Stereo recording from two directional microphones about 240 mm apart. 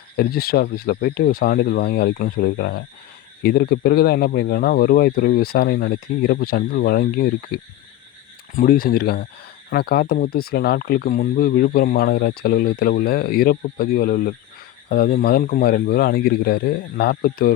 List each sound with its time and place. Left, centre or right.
0.2 s speech: left